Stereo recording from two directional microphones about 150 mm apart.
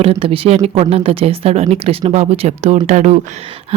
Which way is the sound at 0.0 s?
40° right (ahead or behind).